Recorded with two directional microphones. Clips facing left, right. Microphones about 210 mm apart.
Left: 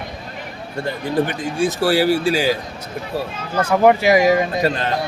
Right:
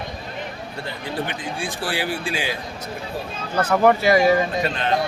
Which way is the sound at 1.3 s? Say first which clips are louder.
Left 8 dB; 45° left (ahead or behind).